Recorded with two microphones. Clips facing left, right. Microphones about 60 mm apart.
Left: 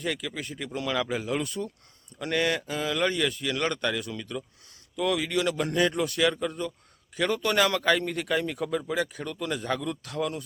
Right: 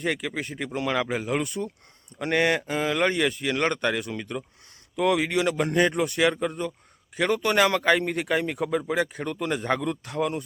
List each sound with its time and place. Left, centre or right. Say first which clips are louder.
0.0 s a man's voice: right 4 dB; right